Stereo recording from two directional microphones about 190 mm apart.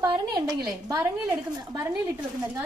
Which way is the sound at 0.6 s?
20° right (ahead or behind).